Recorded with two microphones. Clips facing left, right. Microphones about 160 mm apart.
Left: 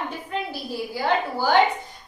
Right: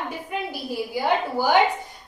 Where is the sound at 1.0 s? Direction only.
15° right (ahead or behind).